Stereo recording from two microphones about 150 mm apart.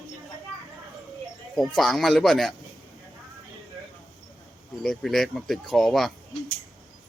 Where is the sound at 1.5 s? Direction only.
Centre (ahead or behind).